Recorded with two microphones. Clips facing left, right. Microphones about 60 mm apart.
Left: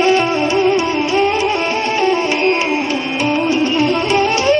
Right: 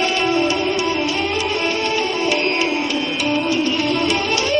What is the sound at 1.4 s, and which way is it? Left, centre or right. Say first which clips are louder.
Music: left 4 dB; left.